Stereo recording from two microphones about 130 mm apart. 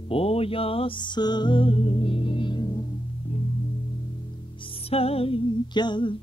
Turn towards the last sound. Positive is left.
turn(degrees=35)  # may be behind; listen again after turning